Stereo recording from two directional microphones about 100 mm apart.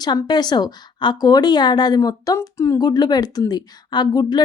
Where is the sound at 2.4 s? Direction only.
30° left (ahead or behind); by 4.4 s 45° left (ahead or behind).